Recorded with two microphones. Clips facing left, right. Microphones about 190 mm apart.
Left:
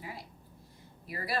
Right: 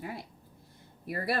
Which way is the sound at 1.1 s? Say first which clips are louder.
Right 4 dB; 60° right (ahead or behind).